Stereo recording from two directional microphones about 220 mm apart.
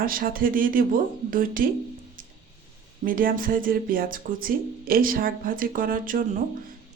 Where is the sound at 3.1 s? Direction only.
40° right (ahead or behind).